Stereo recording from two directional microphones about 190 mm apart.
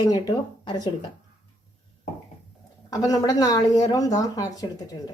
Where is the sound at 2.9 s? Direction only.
20° left (ahead or behind).